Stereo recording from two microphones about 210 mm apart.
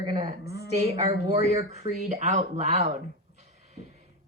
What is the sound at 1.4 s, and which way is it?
Speech, 30° right (ahead or behind).